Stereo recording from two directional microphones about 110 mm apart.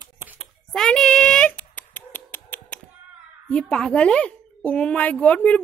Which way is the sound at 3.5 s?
10° left (ahead or behind).